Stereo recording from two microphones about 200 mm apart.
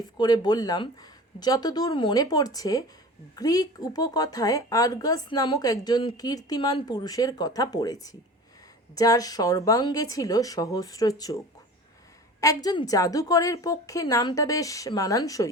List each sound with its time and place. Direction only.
0.0 s a woman's voice: 20° left (ahead or behind)
12.6 s a woman's voice: 20° left (ahead or behind)